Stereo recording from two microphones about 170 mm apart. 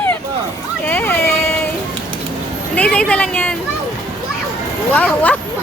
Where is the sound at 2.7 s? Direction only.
5° left (ahead or behind).